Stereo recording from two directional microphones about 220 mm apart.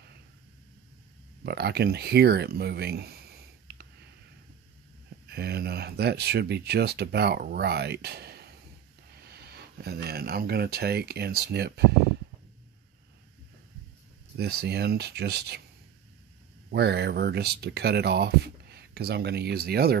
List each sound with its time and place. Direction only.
1.4 s speech: 50° right (ahead or behind)
5.2 s speech: 45° right (ahead or behind)
14.3 s speech: 45° right (ahead or behind)
16.7 s speech: 45° right (ahead or behind)